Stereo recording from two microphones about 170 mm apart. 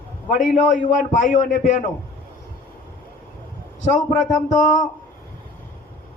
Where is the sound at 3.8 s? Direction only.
45° left (ahead or behind).